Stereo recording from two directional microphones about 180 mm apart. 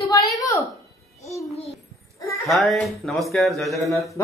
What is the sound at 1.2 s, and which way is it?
Babbling, 15° left (ahead or behind).